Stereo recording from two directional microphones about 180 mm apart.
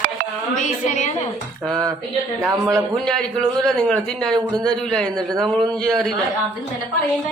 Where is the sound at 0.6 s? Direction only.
40° left (ahead or behind).